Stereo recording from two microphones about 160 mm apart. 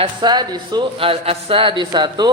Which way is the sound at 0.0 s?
30° right (ahead or behind).